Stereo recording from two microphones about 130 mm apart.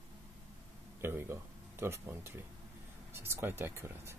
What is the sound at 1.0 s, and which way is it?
Speech, 20° right (ahead or behind).